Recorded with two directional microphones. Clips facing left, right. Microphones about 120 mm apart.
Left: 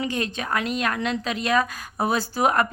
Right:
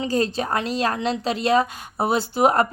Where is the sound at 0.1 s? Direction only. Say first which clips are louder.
Right 5 dB; 35° right (ahead or behind).